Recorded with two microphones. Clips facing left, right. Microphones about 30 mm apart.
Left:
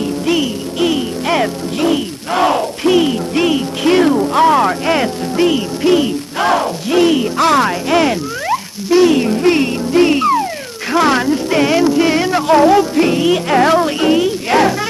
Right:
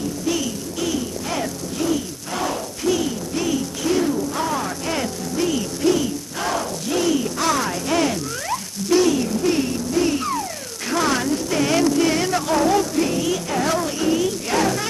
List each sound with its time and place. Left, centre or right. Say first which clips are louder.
0.0 s music: left 8 dB; left
9.1 s music: left 8 dB; left